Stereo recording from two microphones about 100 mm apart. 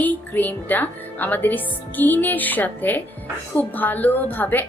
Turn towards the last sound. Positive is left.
turn(degrees=20)  # may be behind; listen again after turning